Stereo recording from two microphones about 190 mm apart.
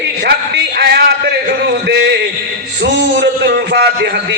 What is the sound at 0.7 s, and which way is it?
Speech, 55° right (ahead or behind).